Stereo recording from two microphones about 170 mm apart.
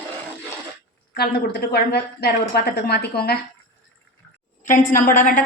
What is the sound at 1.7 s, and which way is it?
A woman's voice, 70° left (ahead or behind).